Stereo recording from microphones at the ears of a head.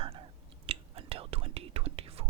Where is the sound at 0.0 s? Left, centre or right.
Right.